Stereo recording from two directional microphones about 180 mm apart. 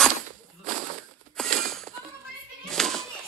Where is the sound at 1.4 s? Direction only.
Centre (ahead or behind).